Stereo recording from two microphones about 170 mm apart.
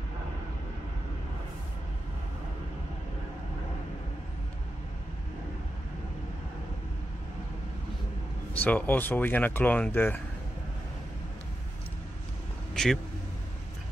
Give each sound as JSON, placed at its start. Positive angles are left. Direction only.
{"t": 8.5, "sound": "speech", "side_deg": 10}
{"t": 12.7, "sound": "vehicle", "side_deg": 5}